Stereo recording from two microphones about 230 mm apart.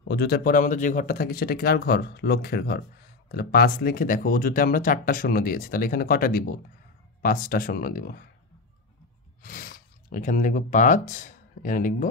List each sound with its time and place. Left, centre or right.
0.1 s speech: left
9.4 s speech: left